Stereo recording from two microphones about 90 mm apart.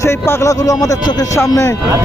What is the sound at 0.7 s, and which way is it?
Speech, 40° left (ahead or behind).